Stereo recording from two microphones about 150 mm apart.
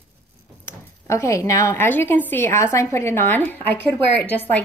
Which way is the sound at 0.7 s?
20° left (ahead or behind).